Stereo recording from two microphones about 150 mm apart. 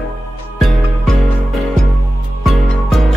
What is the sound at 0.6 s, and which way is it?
Music, centre (ahead or behind).